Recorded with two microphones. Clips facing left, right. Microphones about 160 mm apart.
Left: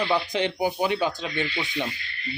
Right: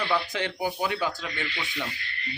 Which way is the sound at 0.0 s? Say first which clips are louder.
Left 3 dB; 20° left (ahead or behind).